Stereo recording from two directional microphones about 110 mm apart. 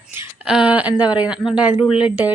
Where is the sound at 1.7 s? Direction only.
55° left (ahead or behind).